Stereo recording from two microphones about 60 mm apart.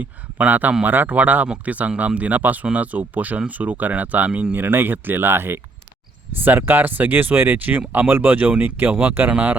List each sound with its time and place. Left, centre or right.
0.0 s speech: right